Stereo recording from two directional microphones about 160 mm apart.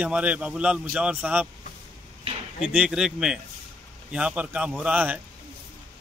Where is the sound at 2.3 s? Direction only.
40° right (ahead or behind).